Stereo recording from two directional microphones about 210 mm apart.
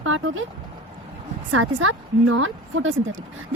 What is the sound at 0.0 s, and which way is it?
Speech, 70° right (ahead or behind).